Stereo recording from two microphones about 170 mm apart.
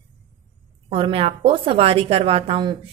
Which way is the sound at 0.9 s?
35° right (ahead or behind).